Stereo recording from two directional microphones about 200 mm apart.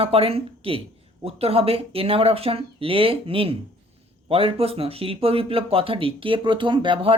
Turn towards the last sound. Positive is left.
turn(degrees=-25)  # may be behind; listen again after turning